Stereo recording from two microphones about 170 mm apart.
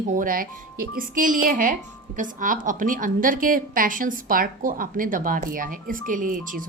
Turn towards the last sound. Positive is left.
turn(degrees=-50)  # may be behind; listen again after turning